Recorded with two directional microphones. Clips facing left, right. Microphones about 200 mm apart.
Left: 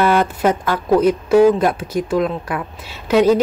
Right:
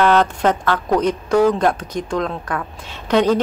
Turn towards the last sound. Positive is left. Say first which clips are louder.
# left 3 dB
turn(degrees=5)  # may be behind; listen again after turning